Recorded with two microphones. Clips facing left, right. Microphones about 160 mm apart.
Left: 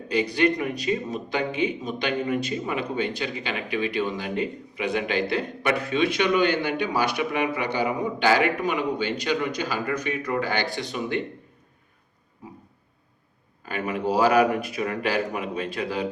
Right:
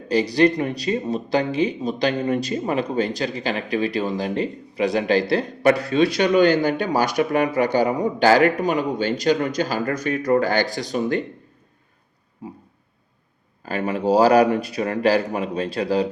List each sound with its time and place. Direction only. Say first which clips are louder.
0.1 s speech: right 5 dB; 35° right (ahead or behind)
13.6 s speech: right 4 dB; 35° right (ahead or behind)